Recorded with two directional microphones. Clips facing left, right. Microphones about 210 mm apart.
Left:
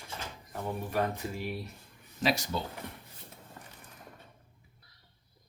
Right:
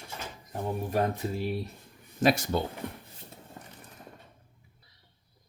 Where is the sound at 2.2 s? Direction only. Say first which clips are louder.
Right 6 dB; 50° right (ahead or behind).